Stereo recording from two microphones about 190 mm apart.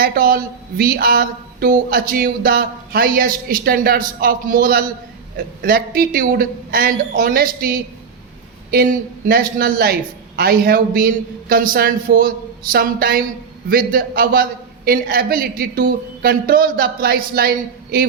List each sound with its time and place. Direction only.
0.0 s speech: 50° right (ahead or behind)